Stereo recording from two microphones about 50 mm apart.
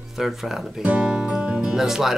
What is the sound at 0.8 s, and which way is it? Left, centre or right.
Music, right.